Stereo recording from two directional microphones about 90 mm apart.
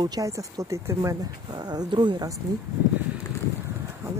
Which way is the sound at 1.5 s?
50° right (ahead or behind).